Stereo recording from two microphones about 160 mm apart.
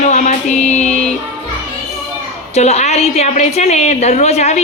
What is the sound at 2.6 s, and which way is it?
A woman's voice, 45° left (ahead or behind).